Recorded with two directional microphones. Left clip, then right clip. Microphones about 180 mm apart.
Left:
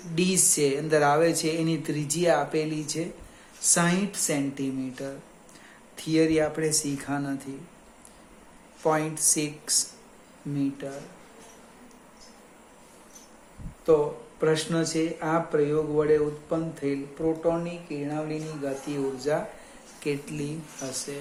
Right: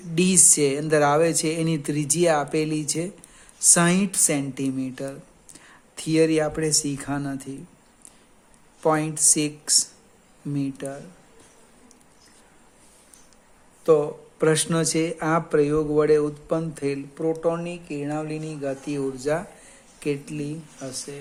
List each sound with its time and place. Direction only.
0.1 s speech: 50° right (ahead or behind)
8.8 s speech: 50° right (ahead or behind)
14.3 s speech: 60° right (ahead or behind)
20.2 s speech: 20° right (ahead or behind)